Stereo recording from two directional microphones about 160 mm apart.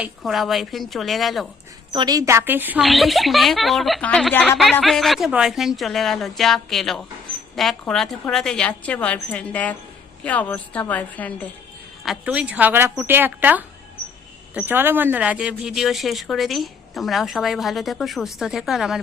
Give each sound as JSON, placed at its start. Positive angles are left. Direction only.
{"t": 0.2, "sound": "a woman's voice", "side_deg": 0}
{"t": 1.9, "sound": "speech", "side_deg": -25}
{"t": 2.8, "sound": "a woman's voice", "side_deg": 0}
{"t": 12.0, "sound": "a woman's voice", "side_deg": -5}